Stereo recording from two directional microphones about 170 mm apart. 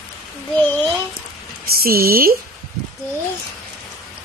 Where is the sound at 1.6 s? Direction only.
60° right (ahead or behind).